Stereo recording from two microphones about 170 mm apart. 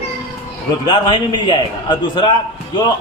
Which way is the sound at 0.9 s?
25° left (ahead or behind).